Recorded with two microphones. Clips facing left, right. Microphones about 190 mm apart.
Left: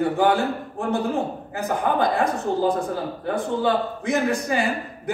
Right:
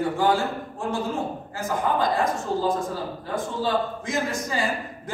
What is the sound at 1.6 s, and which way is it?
A man's voice, 60° left (ahead or behind).